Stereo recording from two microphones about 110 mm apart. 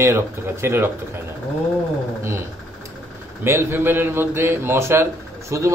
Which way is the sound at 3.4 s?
20° right (ahead or behind).